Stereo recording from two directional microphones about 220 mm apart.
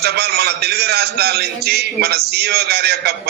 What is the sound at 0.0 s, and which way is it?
A man's voice, 45° right (ahead or behind).